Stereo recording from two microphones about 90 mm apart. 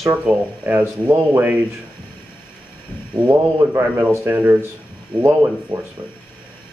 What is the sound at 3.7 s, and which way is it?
Speech, 25° right (ahead or behind).